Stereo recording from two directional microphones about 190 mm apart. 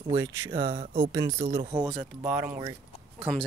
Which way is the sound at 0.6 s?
35° right (ahead or behind).